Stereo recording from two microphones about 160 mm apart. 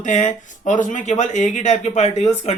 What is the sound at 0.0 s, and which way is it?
Speech, 50° left (ahead or behind).